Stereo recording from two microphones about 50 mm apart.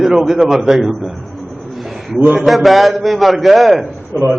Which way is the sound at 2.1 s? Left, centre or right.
Right.